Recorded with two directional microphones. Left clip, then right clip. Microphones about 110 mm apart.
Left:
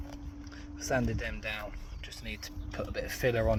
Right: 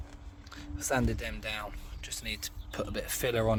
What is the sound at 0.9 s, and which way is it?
Speech, 45° right (ahead or behind).